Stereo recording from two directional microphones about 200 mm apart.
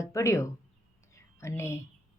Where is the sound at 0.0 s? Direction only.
15° left (ahead or behind).